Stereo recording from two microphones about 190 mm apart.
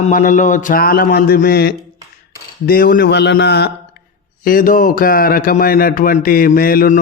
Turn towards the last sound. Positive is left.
turn(degrees=45)  # may be behind; listen again after turning